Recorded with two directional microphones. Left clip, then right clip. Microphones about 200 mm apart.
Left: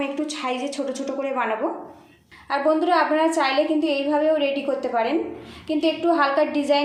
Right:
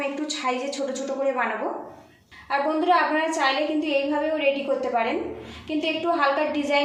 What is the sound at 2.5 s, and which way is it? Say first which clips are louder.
A woman's voice: left 1 dB; 35° left (ahead or behind).